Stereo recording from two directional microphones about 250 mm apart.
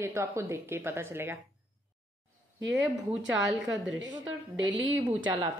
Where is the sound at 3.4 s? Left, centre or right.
Centre.